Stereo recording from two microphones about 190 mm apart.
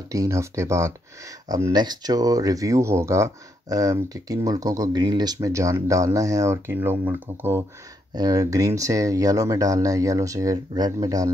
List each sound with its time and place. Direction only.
0.1 s speech: 15° right (ahead or behind)